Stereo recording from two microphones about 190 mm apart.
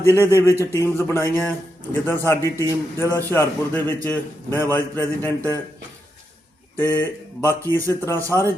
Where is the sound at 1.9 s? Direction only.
10° left (ahead or behind).